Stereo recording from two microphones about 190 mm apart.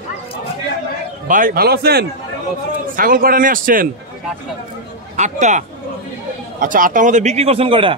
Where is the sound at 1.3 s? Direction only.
50° right (ahead or behind).